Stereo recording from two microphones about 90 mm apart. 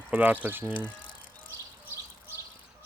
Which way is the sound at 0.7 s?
65° left (ahead or behind).